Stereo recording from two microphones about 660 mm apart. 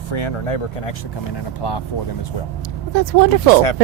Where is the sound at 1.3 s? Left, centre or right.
Left.